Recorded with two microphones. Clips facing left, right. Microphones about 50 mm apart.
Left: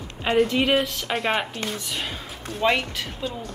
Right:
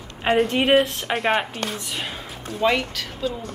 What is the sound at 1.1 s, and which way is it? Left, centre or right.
A woman's voice, centre.